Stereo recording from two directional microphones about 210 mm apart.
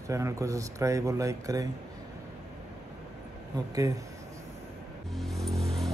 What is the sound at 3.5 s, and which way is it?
Speech, 20° right (ahead or behind).